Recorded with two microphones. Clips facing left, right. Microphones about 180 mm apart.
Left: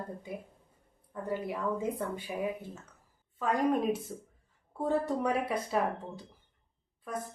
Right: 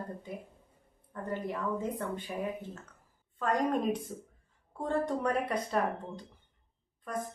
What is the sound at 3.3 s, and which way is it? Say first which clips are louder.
A woman's voice: left 1 dB; 10° left (ahead or behind).